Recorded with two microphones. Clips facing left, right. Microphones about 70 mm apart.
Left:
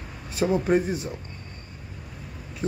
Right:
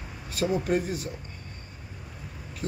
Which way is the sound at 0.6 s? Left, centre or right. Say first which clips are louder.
Left 4 dB; left.